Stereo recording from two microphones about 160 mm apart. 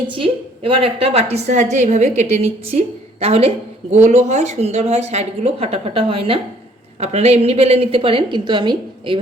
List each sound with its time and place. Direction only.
0.1 s a woman's voice: 35° right (ahead or behind)